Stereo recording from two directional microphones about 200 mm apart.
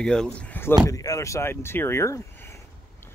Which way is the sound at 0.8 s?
15° left (ahead or behind).